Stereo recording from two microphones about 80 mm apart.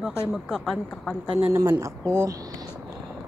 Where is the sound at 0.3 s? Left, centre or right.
Centre.